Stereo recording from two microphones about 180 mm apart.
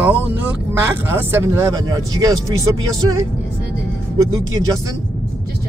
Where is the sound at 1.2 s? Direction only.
10° right (ahead or behind).